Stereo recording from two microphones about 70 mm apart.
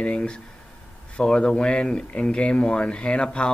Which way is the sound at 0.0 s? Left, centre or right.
Centre.